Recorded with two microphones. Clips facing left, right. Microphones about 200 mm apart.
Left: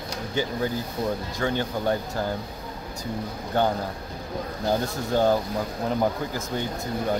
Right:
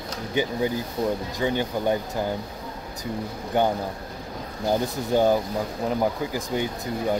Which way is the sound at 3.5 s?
15° right (ahead or behind).